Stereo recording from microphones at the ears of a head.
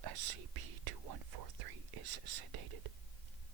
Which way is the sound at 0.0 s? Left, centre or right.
Right.